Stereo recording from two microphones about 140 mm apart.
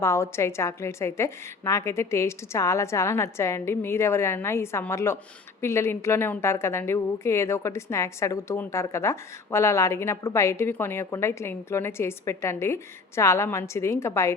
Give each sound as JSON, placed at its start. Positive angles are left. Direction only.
{"t": 0.0, "sound": "a woman's voice", "side_deg": 20}